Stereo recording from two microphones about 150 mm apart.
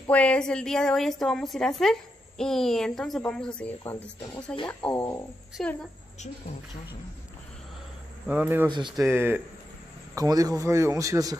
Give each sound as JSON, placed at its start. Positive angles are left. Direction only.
{"t": 0.0, "sound": "a woman's voice", "side_deg": 10}
{"t": 8.3, "sound": "speech", "side_deg": -10}
{"t": 8.6, "sound": "speech", "side_deg": -30}
{"t": 9.0, "sound": "speech", "side_deg": -15}